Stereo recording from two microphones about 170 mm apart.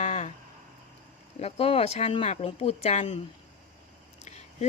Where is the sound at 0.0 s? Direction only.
45° left (ahead or behind).